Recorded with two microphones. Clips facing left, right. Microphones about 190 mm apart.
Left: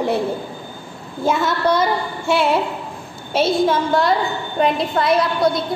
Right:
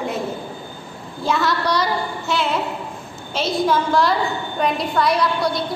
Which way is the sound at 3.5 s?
25° left (ahead or behind).